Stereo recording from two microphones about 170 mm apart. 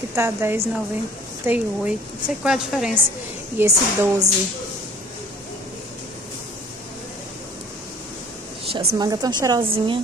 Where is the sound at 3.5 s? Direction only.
15° right (ahead or behind).